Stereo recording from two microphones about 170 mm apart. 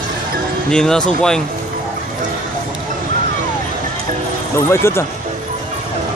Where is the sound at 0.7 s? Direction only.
5° left (ahead or behind).